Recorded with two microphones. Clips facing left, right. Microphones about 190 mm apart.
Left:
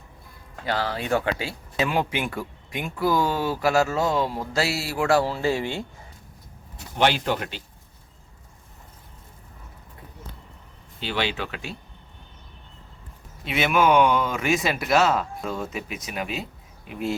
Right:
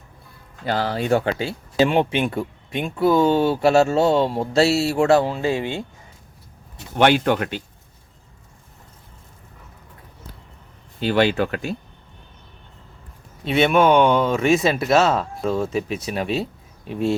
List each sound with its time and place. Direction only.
0.7 s speech: 30° right (ahead or behind)
6.9 s speech: 55° right (ahead or behind)
11.0 s speech: 45° right (ahead or behind)
13.4 s speech: 30° right (ahead or behind)